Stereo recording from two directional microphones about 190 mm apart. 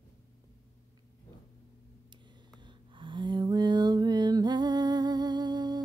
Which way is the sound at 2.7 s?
25° right (ahead or behind).